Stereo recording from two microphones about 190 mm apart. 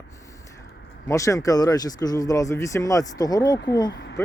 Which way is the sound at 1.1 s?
15° left (ahead or behind).